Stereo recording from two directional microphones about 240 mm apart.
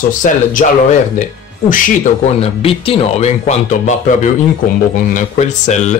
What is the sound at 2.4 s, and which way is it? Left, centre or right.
Speech, left.